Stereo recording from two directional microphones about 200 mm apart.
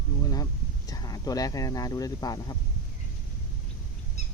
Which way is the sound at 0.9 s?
20° left (ahead or behind).